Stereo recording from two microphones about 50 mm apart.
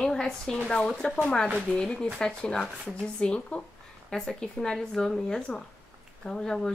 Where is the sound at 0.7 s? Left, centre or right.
Centre.